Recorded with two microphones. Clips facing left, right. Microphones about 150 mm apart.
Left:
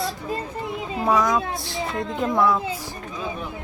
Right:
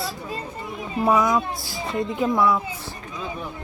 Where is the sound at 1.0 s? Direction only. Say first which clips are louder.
Right 1 dB; 5° right (ahead or behind).